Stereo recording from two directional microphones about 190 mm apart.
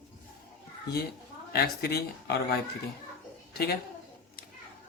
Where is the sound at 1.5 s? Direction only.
55° left (ahead or behind).